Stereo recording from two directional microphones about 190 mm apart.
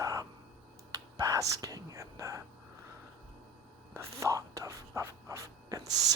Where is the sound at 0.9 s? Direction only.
20° right (ahead or behind).